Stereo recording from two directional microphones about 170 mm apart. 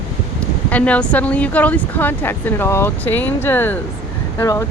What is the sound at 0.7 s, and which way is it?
Speech, 10° left (ahead or behind).